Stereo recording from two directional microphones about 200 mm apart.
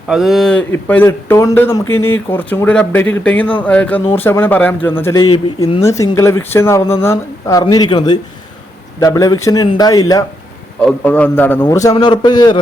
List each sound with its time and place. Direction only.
0.1 s speech: centre (ahead or behind)
1.9 s speech: 90° left
2.3 s speech: 10° left (ahead or behind)
10.8 s speech: 5° left (ahead or behind)